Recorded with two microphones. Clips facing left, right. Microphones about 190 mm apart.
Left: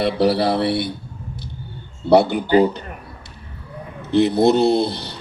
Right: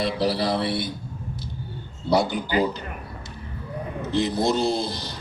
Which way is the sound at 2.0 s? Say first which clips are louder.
Left 7 dB; 65° left (ahead or behind).